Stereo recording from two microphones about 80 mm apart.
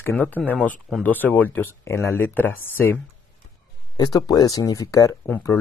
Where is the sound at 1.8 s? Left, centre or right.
Left.